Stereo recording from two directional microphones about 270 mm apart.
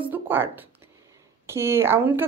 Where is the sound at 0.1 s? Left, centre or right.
Centre.